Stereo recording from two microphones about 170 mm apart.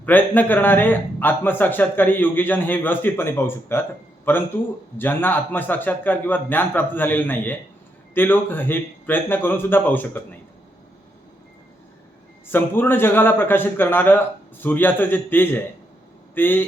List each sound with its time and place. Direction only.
0.0 s a man's voice: 10° left (ahead or behind)
12.5 s a man's voice: 10° left (ahead or behind)